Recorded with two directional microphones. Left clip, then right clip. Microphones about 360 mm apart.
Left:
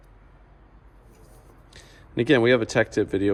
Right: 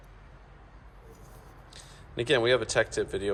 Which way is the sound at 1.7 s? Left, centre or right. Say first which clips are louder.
Left 8 dB; centre.